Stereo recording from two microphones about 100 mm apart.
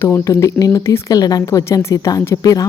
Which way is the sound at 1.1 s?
40° left (ahead or behind).